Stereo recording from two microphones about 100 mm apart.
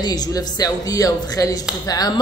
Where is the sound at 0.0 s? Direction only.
40° left (ahead or behind).